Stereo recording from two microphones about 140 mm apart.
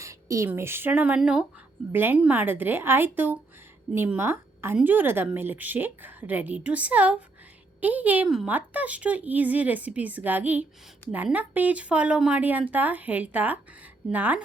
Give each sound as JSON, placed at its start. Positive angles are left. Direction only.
{"t": 0.0, "sound": "a woman's voice", "side_deg": -20}